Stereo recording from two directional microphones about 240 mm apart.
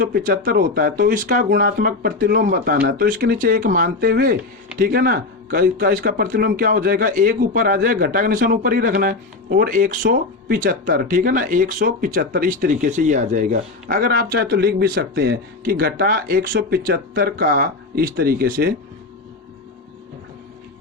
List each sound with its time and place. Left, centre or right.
0.0 s speech: right